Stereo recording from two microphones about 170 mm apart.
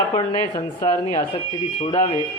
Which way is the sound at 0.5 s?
20° left (ahead or behind).